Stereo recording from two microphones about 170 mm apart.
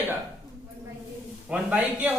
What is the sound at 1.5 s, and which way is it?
Speech, 10° right (ahead or behind).